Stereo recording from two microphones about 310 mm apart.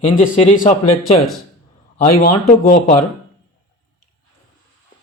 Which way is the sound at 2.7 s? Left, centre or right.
Left.